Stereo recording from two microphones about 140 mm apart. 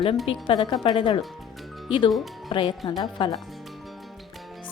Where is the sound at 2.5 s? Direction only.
35° left (ahead or behind).